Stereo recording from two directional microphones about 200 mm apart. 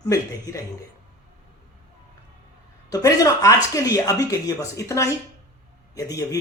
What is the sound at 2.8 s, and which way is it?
A man's voice, 15° left (ahead or behind).